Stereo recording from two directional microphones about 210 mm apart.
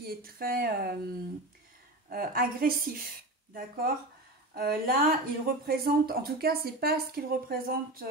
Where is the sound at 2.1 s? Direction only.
45° right (ahead or behind).